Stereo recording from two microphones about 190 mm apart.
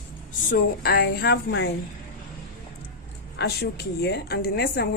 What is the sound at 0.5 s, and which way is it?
A woman's voice, 55° left (ahead or behind).